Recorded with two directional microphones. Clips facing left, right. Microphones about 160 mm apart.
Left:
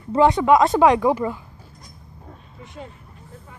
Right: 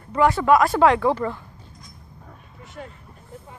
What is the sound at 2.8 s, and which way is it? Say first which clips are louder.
Speech: even; 20° left (ahead or behind).